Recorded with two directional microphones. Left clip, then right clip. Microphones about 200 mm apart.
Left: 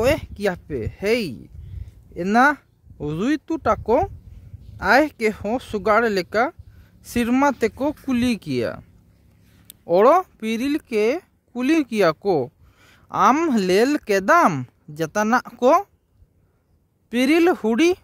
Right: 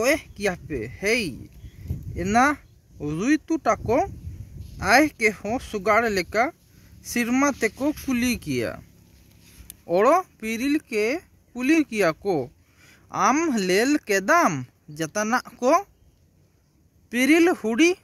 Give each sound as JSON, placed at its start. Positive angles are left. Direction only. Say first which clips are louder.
{"t": 0.0, "sound": "speech", "louder": "left 2 dB", "side_deg": 60}
{"t": 17.1, "sound": "speech", "louder": "left 1 dB", "side_deg": 60}